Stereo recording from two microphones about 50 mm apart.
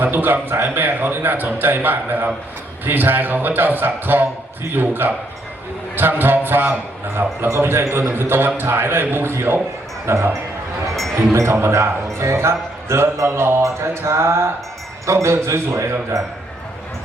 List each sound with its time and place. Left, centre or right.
0.0 s a man's voice: right
11.6 s a man's voice: right